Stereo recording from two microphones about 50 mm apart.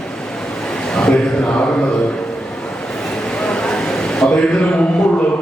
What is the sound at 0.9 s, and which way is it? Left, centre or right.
Mantra, centre.